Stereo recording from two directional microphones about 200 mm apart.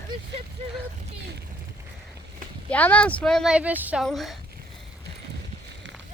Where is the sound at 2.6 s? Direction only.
5° left (ahead or behind).